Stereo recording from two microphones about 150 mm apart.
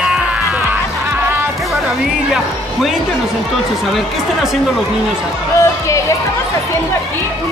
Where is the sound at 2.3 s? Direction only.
5° right (ahead or behind).